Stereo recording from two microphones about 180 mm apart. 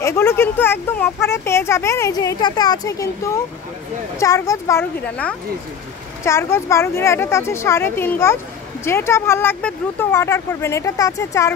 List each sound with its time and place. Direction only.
0.0 s speech: 15° left (ahead or behind)